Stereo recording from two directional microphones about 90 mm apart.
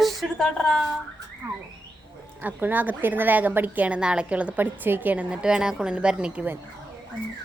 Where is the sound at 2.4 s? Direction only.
20° right (ahead or behind).